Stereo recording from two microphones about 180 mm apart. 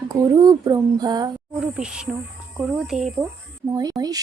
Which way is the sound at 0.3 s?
20° right (ahead or behind).